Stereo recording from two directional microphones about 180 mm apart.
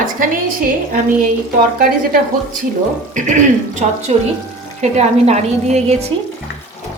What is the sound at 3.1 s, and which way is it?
A woman's voice, 45° right (ahead or behind).